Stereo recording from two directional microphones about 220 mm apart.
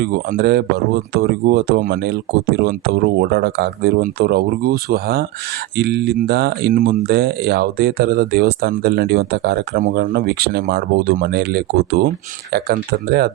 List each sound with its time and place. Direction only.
0.0 s speech: 45° right (ahead or behind)